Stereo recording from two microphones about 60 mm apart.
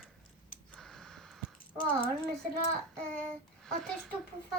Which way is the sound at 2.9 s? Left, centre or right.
Centre.